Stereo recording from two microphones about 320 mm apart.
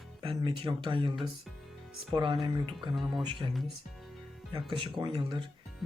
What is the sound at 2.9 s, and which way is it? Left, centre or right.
Speech, centre.